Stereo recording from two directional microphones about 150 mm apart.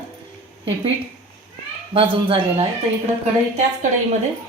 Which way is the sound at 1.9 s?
35° right (ahead or behind).